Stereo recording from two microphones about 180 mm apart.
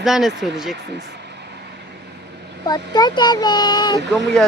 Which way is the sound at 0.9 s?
70° right (ahead or behind).